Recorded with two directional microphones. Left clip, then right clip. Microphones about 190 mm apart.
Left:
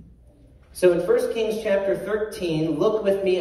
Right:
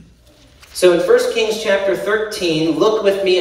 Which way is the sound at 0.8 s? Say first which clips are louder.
Right 7 dB; 25° left (ahead or behind).